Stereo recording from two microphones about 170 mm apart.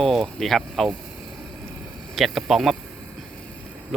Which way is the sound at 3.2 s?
5° left (ahead or behind).